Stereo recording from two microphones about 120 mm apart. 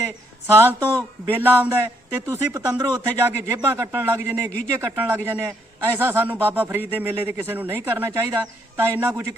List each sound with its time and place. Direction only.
0.4 s a man's voice: 20° right (ahead or behind); by 3.1 s 35° right (ahead or behind)
3.1 s a man's voice: 15° right (ahead or behind)